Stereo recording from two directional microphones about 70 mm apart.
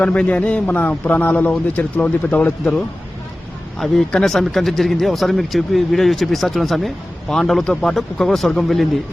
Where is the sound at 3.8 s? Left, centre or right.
Centre.